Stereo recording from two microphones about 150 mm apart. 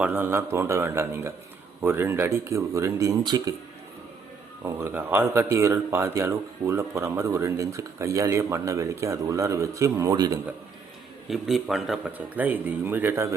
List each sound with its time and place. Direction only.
0.0 s speech: 10° right (ahead or behind)
4.6 s speech: 15° right (ahead or behind)
11.3 s a man's voice: centre (ahead or behind)
12.1 s speech: 10° right (ahead or behind)